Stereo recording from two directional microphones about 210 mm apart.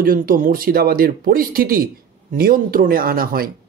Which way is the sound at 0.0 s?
40° right (ahead or behind).